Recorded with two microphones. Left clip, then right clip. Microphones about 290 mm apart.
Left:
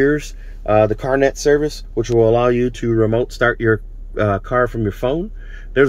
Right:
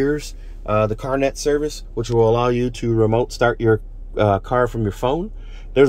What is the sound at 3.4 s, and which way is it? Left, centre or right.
Speech, right.